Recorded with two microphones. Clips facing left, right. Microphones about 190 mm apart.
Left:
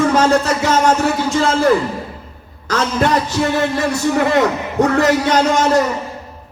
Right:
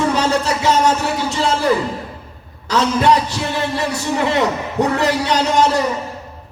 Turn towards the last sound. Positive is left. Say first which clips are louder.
# left 2 dB
turn(degrees=50)  # may be behind; listen again after turning